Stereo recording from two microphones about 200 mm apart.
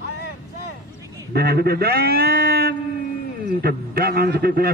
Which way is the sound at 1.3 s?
50° right (ahead or behind).